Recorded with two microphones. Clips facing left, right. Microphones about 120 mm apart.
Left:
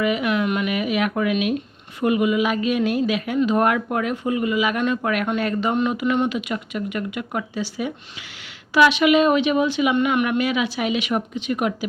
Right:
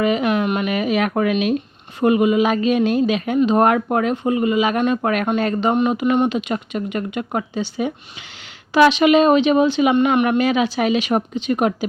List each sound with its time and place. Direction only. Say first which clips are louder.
0.0 s speech: right 3 dB; 30° right (ahead or behind)